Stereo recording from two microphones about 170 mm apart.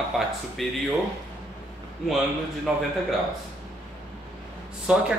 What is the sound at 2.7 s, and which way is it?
Speech, 5° right (ahead or behind).